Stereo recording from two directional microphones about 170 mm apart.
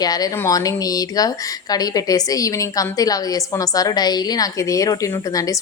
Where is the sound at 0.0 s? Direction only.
20° left (ahead or behind).